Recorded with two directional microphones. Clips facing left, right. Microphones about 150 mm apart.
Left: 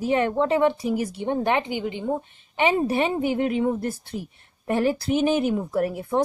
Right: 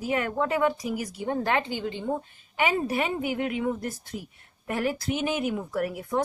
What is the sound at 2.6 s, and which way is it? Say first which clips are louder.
Speech: left 4 dB; 25° left (ahead or behind).